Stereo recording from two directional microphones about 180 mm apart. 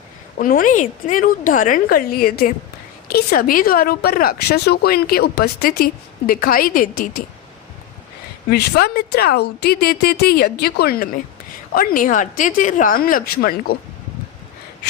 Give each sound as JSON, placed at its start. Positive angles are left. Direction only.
{"t": 0.3, "sound": "a woman's voice", "side_deg": 50}
{"t": 8.4, "sound": "a woman's voice", "side_deg": 60}